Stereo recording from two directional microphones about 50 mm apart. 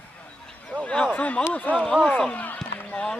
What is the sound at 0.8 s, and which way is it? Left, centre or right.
Speech, left.